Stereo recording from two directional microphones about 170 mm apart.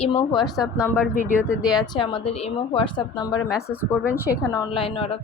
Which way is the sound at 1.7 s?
25° left (ahead or behind).